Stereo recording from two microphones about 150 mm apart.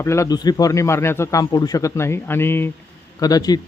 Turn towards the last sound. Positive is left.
turn(degrees=25)  # may be behind; listen again after turning